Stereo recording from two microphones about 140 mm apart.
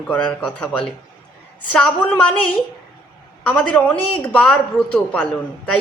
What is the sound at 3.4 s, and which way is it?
Speech, 10° left (ahead or behind).